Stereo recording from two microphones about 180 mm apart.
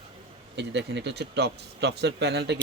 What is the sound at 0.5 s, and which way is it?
Speech, 75° right (ahead or behind).